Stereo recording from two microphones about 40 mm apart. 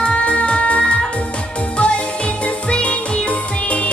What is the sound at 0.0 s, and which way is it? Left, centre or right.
Music, left.